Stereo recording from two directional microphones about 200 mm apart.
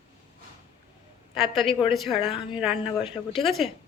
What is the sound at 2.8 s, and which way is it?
Speech, 25° left (ahead or behind).